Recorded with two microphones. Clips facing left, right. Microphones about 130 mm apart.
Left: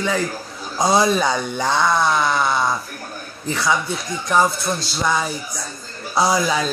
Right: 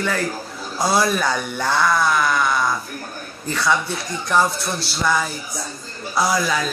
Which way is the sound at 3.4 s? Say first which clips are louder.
Even; 15° left (ahead or behind).